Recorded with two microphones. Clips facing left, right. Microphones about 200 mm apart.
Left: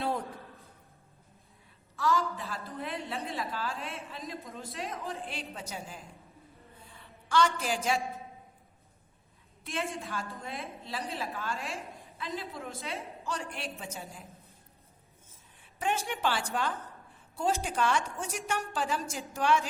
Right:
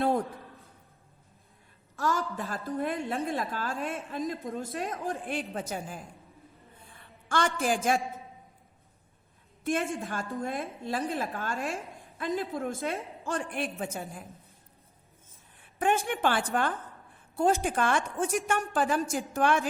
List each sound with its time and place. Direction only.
2.0 s a sound: 50° right (ahead or behind)
2.3 s a woman's voice: 50° right (ahead or behind)
7.3 s a woman's voice: 50° right (ahead or behind)
9.6 s a woman's voice: 50° right (ahead or behind)
15.6 s a woman's voice: 55° right (ahead or behind)